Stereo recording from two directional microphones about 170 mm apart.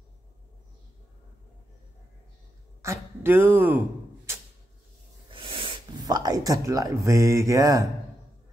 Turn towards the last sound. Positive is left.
turn(degrees=-20)  # may be behind; listen again after turning